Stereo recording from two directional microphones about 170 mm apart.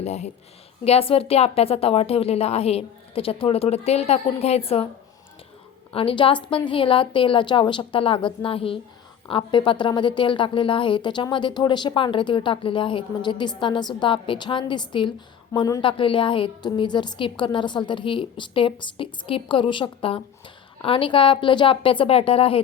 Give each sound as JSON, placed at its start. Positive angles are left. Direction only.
{"t": 0.0, "sound": "a woman's voice", "side_deg": 40}
{"t": 5.9, "sound": "a woman's voice", "side_deg": 35}